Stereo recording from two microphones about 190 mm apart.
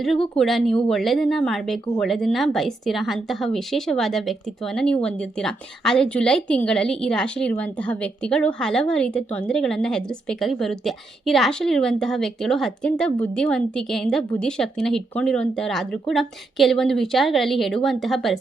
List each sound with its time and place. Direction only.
0.3 s a woman's voice: centre (ahead or behind)